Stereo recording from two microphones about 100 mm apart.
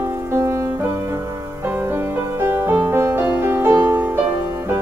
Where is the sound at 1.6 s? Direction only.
25° right (ahead or behind).